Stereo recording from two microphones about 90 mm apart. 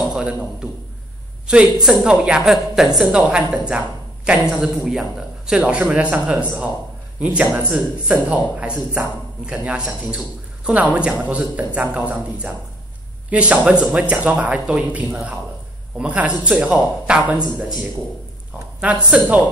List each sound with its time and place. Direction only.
0.1 s a man's voice: 10° right (ahead or behind)
18.8 s speech: 10° right (ahead or behind)